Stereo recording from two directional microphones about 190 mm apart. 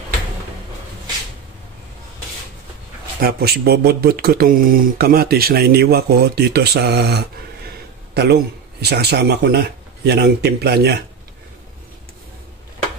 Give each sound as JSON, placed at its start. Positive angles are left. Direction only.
{"t": 3.2, "sound": "a man's voice", "side_deg": -55}